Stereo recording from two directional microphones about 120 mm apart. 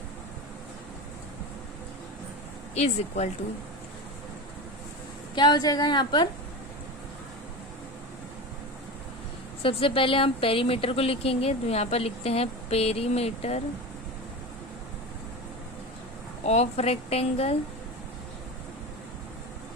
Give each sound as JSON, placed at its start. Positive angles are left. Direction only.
{"t": 2.7, "sound": "speech", "side_deg": 65}
{"t": 5.3, "sound": "a woman's voice", "side_deg": 40}
{"t": 9.6, "sound": "speech", "side_deg": 50}
{"t": 16.4, "sound": "speech", "side_deg": 65}